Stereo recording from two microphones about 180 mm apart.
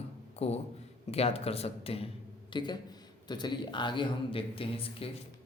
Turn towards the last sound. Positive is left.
turn(degrees=30)  # may be behind; listen again after turning